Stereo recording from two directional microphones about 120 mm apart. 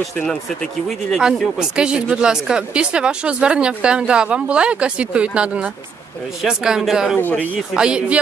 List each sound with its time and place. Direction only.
0.0 s speech: 5° left (ahead or behind)
7.2 s speech: 15° left (ahead or behind)
7.7 s speech: 10° right (ahead or behind)